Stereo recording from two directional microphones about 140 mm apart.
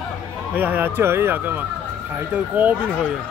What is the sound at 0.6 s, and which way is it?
Speech, 10° right (ahead or behind).